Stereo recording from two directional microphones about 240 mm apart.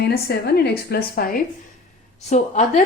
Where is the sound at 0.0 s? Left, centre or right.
Left.